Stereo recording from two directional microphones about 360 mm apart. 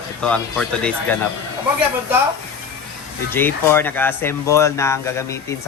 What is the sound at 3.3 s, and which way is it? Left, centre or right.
Speech, centre.